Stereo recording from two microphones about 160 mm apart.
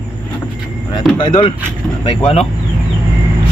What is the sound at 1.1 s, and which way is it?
Vehicle, 30° left (ahead or behind).